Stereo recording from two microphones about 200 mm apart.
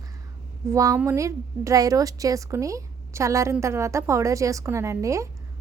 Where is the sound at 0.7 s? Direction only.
15° right (ahead or behind).